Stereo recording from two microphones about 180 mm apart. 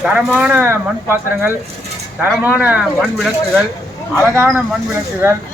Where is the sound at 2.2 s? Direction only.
10° right (ahead or behind).